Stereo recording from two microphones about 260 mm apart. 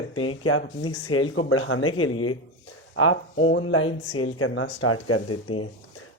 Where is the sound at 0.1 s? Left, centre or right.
Left.